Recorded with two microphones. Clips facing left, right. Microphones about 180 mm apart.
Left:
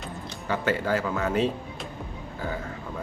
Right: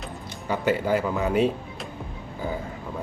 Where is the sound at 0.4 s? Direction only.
15° right (ahead or behind).